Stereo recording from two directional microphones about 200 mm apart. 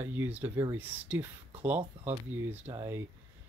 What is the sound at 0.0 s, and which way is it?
Speech, 10° right (ahead or behind).